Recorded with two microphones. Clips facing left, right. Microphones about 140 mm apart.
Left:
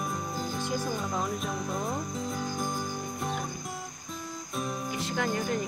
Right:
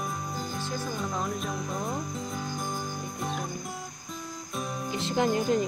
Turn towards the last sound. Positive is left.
turn(degrees=-20)  # may be behind; listen again after turning